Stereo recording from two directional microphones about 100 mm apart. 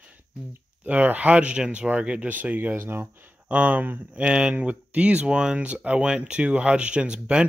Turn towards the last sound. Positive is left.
turn(degrees=-10)  # may be behind; listen again after turning